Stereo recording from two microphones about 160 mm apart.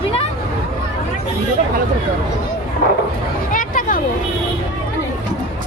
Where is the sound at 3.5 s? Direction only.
55° left (ahead or behind).